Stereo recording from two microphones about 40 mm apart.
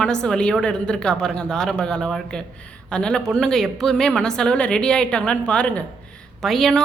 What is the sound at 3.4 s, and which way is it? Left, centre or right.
A woman's voice, centre.